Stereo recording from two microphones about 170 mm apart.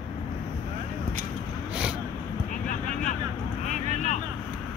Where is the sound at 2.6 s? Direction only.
50° left (ahead or behind).